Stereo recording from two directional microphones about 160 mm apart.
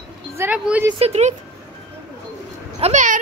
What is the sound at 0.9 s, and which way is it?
Speech, 40° right (ahead or behind).